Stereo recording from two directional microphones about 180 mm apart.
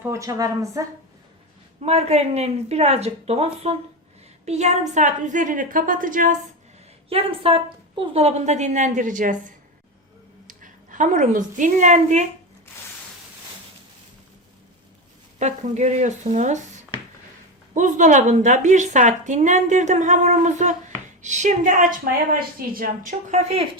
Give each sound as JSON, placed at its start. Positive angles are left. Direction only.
{"t": 0.0, "sound": "a woman's voice", "side_deg": -15}
{"t": 1.8, "sound": "a woman's voice", "side_deg": -35}
{"t": 7.1, "sound": "a woman's voice", "side_deg": -30}
{"t": 10.4, "sound": "a woman's voice", "side_deg": -45}
{"t": 15.4, "sound": "a woman's voice", "side_deg": -40}
{"t": 17.7, "sound": "a woman's voice", "side_deg": -45}